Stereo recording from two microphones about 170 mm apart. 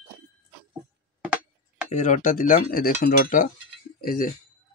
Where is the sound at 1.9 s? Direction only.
45° left (ahead or behind).